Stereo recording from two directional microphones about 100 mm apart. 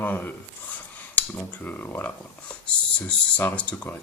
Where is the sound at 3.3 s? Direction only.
15° left (ahead or behind).